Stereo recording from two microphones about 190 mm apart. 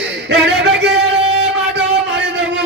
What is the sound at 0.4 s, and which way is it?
Music, 60° right (ahead or behind).